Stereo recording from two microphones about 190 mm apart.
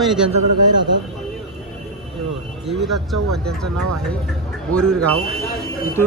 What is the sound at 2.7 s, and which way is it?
Speech, centre (ahead or behind).